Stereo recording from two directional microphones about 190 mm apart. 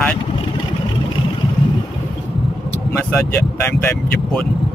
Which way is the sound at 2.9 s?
10° left (ahead or behind).